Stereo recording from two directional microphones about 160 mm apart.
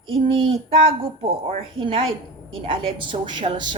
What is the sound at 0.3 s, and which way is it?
Speech, 35° right (ahead or behind).